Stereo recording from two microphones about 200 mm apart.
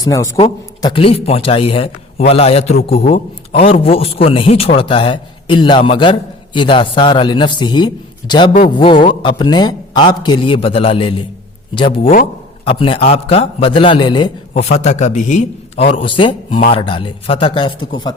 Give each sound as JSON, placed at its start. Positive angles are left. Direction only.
{"t": 0.0, "sound": "a man's voice", "side_deg": 15}